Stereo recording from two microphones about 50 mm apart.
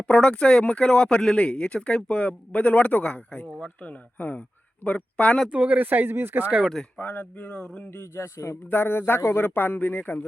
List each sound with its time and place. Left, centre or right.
0.0 s speech: left
5.5 s speech: right
6.9 s speech: left
7.5 s speech: left
7.9 s a man's voice: left
8.7 s a man's voice: left